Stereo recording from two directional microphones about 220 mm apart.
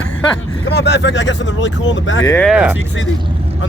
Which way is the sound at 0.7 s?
50° left (ahead or behind).